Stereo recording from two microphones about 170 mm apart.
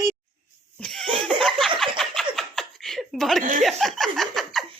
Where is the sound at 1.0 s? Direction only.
30° right (ahead or behind).